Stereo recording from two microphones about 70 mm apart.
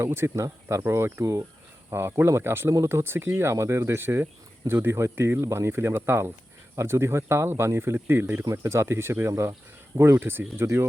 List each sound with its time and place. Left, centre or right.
0.0 s speech: right
1.2 s speech: right
1.9 s speech: right